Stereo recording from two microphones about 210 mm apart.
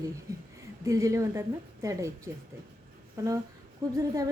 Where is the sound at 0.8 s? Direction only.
15° right (ahead or behind).